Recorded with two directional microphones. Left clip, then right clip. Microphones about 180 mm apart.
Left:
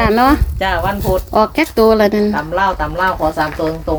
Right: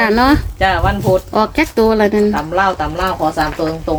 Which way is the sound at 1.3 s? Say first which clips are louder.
Left 1 dB; 15° left (ahead or behind).